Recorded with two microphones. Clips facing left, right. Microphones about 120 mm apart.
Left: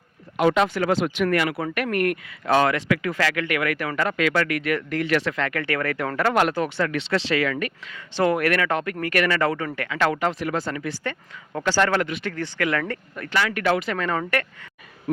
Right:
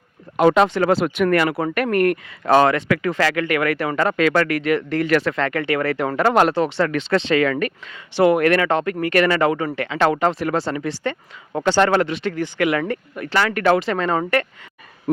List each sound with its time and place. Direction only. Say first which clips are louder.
0.3 s speech: right 5 dB; 35° right (ahead or behind)
4.6 s speech: right 5 dB; 25° right (ahead or behind)
4.9 s speech: right 4 dB; 45° right (ahead or behind); by 6.8 s 25° right (ahead or behind)
6.8 s speech: right 4 dB; 40° right (ahead or behind)
7.5 s speech: right 5 dB; 45° right (ahead or behind)
7.9 s speech: right 6 dB; 15° right (ahead or behind)
8.4 s speech: right 5 dB; 25° right (ahead or behind)
13.3 s speech: right 5 dB; 40° right (ahead or behind); by 14.4 s 25° right (ahead or behind)